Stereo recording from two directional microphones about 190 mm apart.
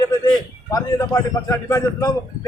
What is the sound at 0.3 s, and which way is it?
A man's voice, 20° left (ahead or behind).